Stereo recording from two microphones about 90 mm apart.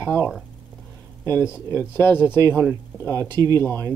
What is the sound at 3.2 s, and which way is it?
Speech, 50° right (ahead or behind).